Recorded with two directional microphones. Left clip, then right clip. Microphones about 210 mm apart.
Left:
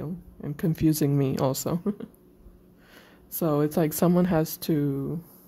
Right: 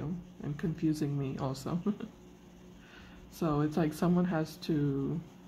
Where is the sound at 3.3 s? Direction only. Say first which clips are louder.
Left 7 dB; 50° left (ahead or behind).